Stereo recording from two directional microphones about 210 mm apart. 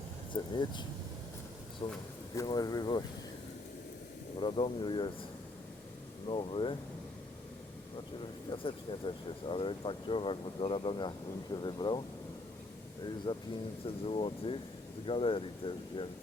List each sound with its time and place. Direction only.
0.3 s speech: 25° left (ahead or behind)
1.8 s speech: 25° left (ahead or behind)
4.4 s speech: 25° left (ahead or behind)
6.2 s speech: 25° left (ahead or behind)
8.4 s speech: 25° left (ahead or behind)
13.3 s speech: 25° left (ahead or behind)